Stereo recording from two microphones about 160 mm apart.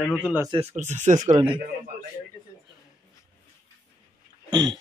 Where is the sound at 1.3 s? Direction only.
30° right (ahead or behind).